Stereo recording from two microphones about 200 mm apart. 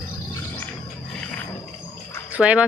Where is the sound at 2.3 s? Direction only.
5° right (ahead or behind).